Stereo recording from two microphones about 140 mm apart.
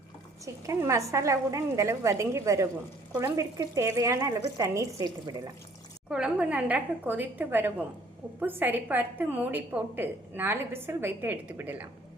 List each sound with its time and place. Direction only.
0.4 s a woman's voice: 20° right (ahead or behind)
6.1 s a woman's voice: 5° right (ahead or behind)